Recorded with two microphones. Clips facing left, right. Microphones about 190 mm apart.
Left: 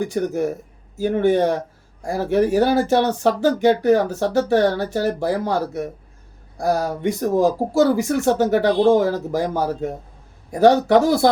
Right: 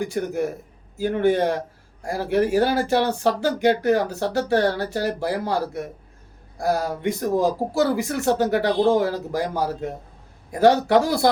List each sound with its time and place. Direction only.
0.1 s speech: 15° left (ahead or behind)